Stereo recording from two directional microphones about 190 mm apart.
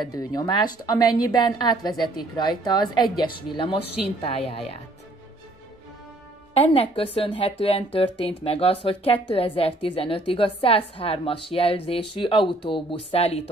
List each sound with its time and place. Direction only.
0.0 s a woman's voice: 20° left (ahead or behind)
6.5 s a woman's voice: 30° left (ahead or behind)